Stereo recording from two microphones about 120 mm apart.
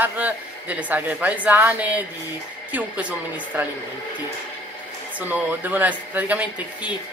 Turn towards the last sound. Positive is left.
turn(degrees=-15)  # may be behind; listen again after turning